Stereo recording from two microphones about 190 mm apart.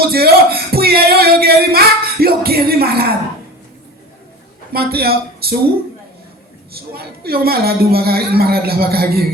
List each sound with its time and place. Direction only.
0.0 s a sound: 55° right (ahead or behind)
4.7 s a man's voice: 55° right (ahead or behind)
6.7 s a man's voice: 55° right (ahead or behind)